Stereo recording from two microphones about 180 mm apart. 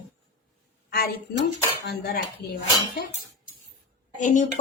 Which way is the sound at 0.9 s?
55° left (ahead or behind).